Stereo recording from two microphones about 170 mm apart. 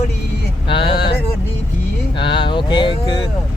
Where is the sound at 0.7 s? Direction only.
30° left (ahead or behind).